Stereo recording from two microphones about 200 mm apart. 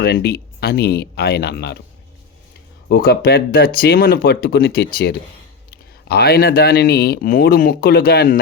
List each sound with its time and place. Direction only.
0.0 s speech: 55° left (ahead or behind)
2.9 s speech: 50° left (ahead or behind)